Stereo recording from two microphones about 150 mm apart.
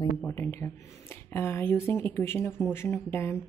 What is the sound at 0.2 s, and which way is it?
Speech, 15° left (ahead or behind).